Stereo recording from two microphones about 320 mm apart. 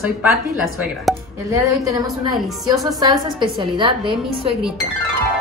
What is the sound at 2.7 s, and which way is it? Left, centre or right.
A woman's voice, centre.